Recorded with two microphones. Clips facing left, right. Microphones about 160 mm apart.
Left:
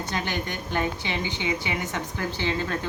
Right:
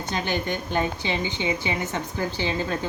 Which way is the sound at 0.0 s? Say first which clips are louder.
Right 2 dB; 20° right (ahead or behind).